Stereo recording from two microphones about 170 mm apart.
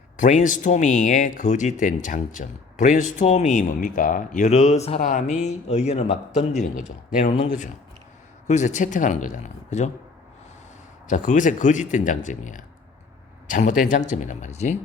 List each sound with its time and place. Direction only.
0.2 s speech: 50° left (ahead or behind)
8.4 s speech: 45° left (ahead or behind)
11.1 s speech: 50° left (ahead or behind)